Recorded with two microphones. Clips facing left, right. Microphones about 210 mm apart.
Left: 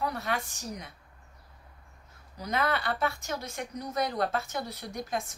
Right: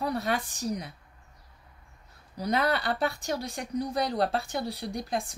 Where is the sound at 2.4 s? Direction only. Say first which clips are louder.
Right 3 dB; 35° right (ahead or behind).